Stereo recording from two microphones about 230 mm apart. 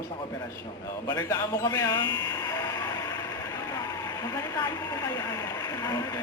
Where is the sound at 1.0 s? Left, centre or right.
Centre.